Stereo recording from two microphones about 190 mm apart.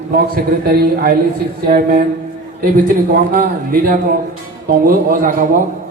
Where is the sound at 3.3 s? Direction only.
50° right (ahead or behind).